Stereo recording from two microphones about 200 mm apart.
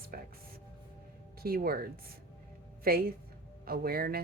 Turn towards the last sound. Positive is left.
turn(degrees=-50)  # may be behind; listen again after turning